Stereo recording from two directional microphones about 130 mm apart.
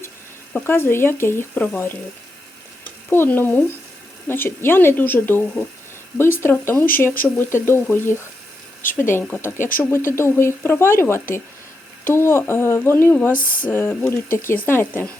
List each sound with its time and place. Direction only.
0.5 s speech: 15° left (ahead or behind)
3.1 s speech: 15° left (ahead or behind)
13.3 s speech: 90° left
13.7 s speech: 15° left (ahead or behind)